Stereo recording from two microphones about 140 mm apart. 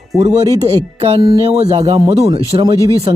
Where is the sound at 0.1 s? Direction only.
Centre (ahead or behind).